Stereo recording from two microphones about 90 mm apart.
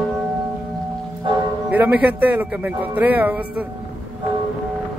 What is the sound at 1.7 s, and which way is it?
Speech, 20° right (ahead or behind).